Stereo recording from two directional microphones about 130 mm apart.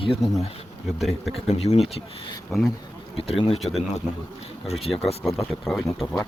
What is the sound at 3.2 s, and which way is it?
Speech, 45° left (ahead or behind).